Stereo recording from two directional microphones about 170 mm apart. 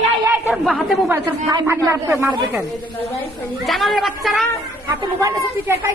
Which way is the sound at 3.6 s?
Centre (ahead or behind).